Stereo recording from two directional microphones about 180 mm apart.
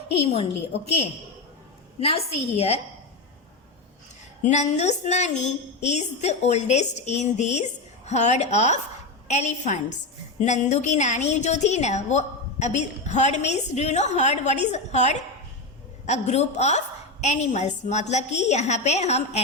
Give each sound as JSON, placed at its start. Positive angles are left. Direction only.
{"t": 0.2, "sound": "a woman's voice", "side_deg": 35}
{"t": 4.4, "sound": "a woman's voice", "side_deg": 40}